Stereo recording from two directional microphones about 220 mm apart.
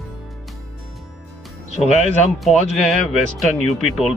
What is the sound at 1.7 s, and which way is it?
Speech, 30° left (ahead or behind).